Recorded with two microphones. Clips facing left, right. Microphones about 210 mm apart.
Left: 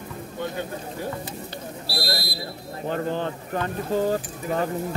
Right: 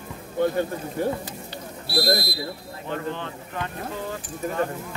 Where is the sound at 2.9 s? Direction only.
40° left (ahead or behind).